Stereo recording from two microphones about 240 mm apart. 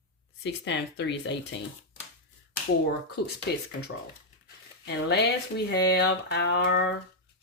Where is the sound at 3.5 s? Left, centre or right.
Left.